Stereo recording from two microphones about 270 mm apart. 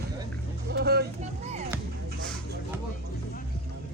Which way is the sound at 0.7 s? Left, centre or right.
Right.